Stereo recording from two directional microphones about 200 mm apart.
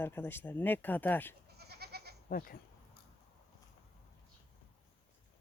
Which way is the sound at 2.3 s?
45° left (ahead or behind).